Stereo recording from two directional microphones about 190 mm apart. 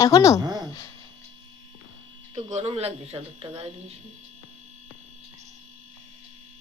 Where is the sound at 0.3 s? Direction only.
20° right (ahead or behind).